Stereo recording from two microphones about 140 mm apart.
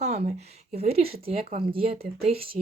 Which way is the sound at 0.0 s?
50° right (ahead or behind).